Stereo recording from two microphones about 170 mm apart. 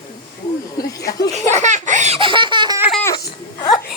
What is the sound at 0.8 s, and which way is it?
Speech, 20° left (ahead or behind).